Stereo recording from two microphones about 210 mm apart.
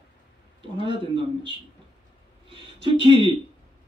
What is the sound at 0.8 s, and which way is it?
Speech, 25° right (ahead or behind).